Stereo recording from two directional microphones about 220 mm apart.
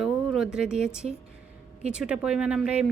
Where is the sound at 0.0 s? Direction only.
Centre (ahead or behind).